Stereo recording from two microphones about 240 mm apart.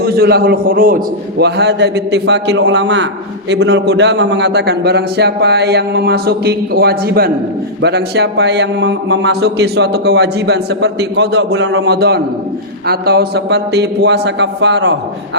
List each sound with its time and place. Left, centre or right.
0.0 s speech: right